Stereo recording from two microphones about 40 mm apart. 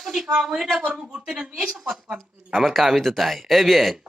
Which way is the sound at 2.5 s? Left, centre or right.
Centre.